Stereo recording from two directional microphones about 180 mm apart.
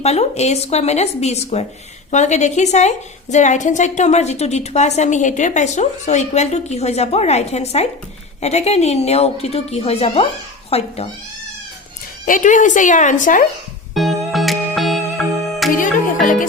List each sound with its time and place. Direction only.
0.0 s a woman's voice: 35° left (ahead or behind)
12.2 s a woman's voice: 45° left (ahead or behind)
13.9 s music: centre (ahead or behind)